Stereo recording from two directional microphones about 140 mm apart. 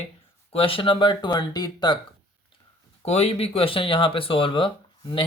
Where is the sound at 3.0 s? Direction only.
50° left (ahead or behind).